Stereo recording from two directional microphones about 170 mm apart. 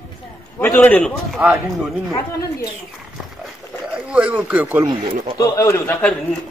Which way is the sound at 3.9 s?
5° right (ahead or behind).